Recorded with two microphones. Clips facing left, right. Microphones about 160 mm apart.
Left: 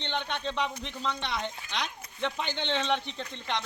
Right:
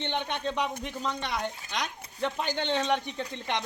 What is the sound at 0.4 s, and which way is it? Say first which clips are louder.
Speech: right 2 dB; 10° right (ahead or behind).